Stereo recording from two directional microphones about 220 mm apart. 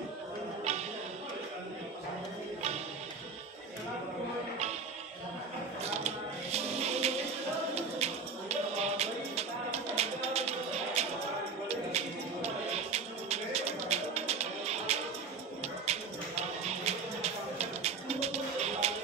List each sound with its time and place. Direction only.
0.7 s music: 30° right (ahead or behind)
5.9 s music: 30° right (ahead or behind)
7.7 s a sound: 30° right (ahead or behind)
11.0 s music: 30° right (ahead or behind)
12.9 s music: 30° right (ahead or behind)
16.6 s a sound: 30° right (ahead or behind)